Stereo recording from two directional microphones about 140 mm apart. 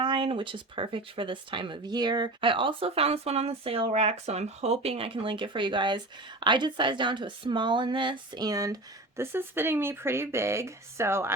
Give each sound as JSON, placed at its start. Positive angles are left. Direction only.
{"t": 0.0, "sound": "speech", "side_deg": -35}